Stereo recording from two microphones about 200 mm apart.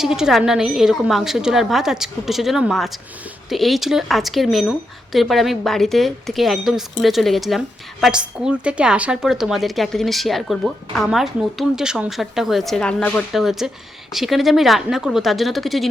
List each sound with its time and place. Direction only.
0.0 s a woman's voice: centre (ahead or behind)